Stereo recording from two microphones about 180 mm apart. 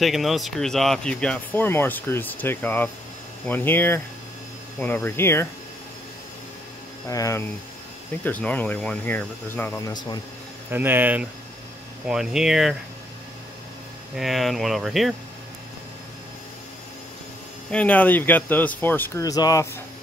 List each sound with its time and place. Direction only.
0.0 s speech: centre (ahead or behind)
7.1 s speech: 15° left (ahead or behind)
10.7 s speech: 10° right (ahead or behind)
14.1 s speech: centre (ahead or behind)
17.6 s speech: 5° left (ahead or behind)